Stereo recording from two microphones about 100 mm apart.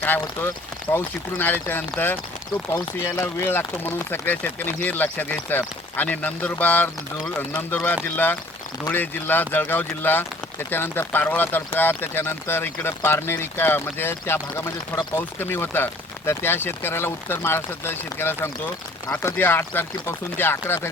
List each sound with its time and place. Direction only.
0.0 s speech: 20° left (ahead or behind)
8.0 s speech: 20° left (ahead or behind)